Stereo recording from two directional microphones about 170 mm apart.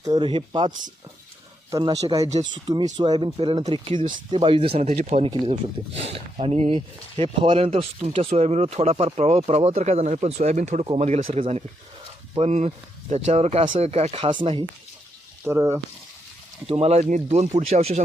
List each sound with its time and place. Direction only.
0.0 s speech: 25° right (ahead or behind)
1.7 s speech: 20° right (ahead or behind)
15.4 s speech: 15° right (ahead or behind)
16.6 s speech: 35° right (ahead or behind)